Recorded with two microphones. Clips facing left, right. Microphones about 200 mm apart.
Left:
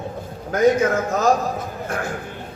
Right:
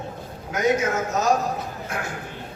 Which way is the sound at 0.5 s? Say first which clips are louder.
Left 5 dB; 55° left (ahead or behind).